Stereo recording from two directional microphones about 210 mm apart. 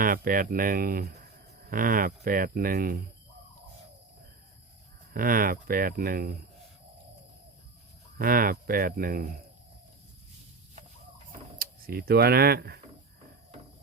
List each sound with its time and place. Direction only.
0.0 s speech: 40° right (ahead or behind)
5.1 s speech: 40° right (ahead or behind)
8.2 s speech: 45° right (ahead or behind)
11.3 s a sound: 45° right (ahead or behind)